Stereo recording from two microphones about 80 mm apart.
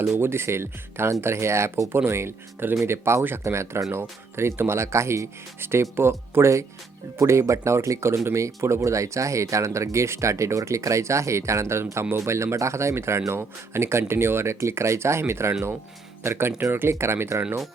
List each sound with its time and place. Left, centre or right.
0.0 s speech: right